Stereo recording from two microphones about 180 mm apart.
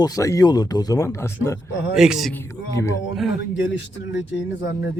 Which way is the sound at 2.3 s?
15° left (ahead or behind).